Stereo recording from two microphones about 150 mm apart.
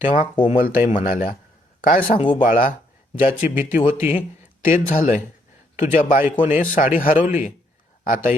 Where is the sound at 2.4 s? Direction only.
65° left (ahead or behind).